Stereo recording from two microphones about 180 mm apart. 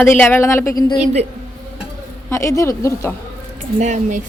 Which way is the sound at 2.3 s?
15° left (ahead or behind).